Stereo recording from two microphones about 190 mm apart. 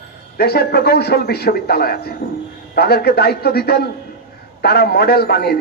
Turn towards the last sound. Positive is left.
turn(degrees=55)  # may be behind; listen again after turning